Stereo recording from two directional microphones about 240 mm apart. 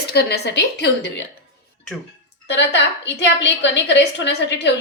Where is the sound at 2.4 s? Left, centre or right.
Left.